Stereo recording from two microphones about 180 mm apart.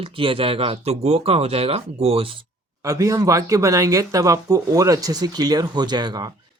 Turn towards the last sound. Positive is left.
turn(degrees=-25)  # may be behind; listen again after turning